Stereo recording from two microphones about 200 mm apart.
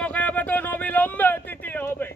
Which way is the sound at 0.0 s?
5° left (ahead or behind).